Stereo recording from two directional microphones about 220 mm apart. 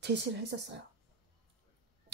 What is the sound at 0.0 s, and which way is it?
Speech, 50° right (ahead or behind).